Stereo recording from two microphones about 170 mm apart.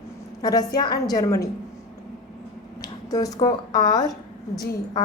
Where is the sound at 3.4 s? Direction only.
25° left (ahead or behind).